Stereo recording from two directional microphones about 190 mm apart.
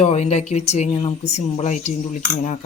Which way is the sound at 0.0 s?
35° left (ahead or behind).